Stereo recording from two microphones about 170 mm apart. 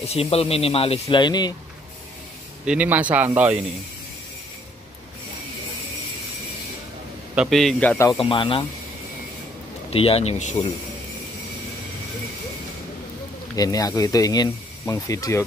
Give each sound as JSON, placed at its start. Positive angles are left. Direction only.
{"t": 0.0, "sound": "speech", "side_deg": 35}
{"t": 1.0, "sound": "speech", "side_deg": 25}
{"t": 2.6, "sound": "speech", "side_deg": -5}
{"t": 7.3, "sound": "a man's voice", "side_deg": 0}
{"t": 8.2, "sound": "speech", "side_deg": 30}
{"t": 9.8, "sound": "speech", "side_deg": 35}
{"t": 13.6, "sound": "speech", "side_deg": 20}